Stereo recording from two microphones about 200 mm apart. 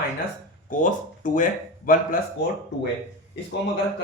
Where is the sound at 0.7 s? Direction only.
40° left (ahead or behind).